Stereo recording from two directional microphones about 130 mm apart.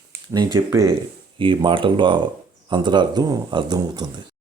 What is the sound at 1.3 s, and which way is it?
Speech, 40° right (ahead or behind).